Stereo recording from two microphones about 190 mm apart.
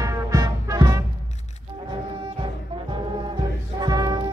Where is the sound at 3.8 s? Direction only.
20° right (ahead or behind).